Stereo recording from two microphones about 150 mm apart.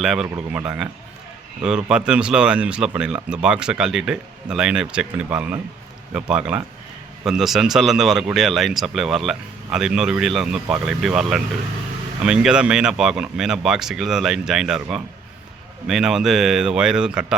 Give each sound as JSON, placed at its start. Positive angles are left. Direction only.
{"t": 0.0, "sound": "speech", "side_deg": -5}